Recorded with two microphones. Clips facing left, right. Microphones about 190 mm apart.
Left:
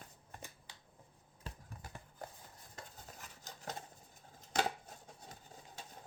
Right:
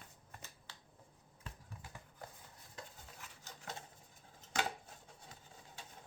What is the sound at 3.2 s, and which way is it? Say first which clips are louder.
Rub: left 3 dB; 40° left (ahead or behind).